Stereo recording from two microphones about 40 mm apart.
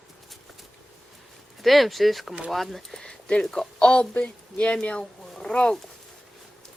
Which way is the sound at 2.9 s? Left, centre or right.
Centre.